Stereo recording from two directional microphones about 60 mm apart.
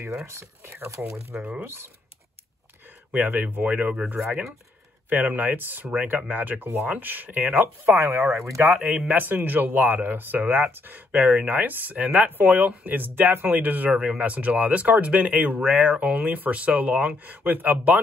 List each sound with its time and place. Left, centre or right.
0.3 s speech: right
1.3 s speech: right
1.6 s speech: right
3.1 s speech: right
9.0 s speech: right